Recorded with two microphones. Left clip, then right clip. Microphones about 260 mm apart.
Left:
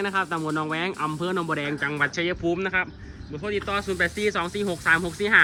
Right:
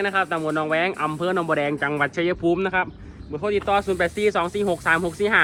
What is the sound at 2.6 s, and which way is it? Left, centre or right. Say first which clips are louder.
Speech: right 3 dB; right.